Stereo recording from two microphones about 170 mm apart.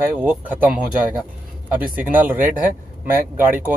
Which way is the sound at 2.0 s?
10° right (ahead or behind).